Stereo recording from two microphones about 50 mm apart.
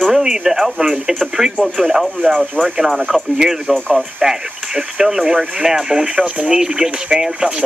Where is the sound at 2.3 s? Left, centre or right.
Centre.